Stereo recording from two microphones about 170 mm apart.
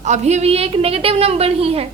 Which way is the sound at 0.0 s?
40° right (ahead or behind).